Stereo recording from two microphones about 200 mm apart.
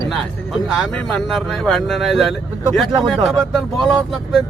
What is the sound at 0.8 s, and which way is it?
Speech, centre (ahead or behind).